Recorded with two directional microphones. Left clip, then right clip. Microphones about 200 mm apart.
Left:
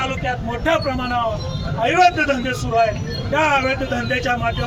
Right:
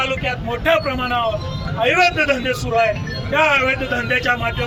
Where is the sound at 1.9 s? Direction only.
20° right (ahead or behind).